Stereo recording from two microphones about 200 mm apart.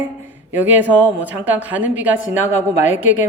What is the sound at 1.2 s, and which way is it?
A woman's voice, 10° right (ahead or behind).